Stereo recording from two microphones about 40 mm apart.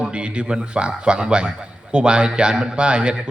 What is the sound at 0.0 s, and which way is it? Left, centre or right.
A man's voice, right.